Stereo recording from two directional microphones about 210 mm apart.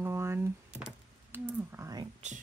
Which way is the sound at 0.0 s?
10° right (ahead or behind).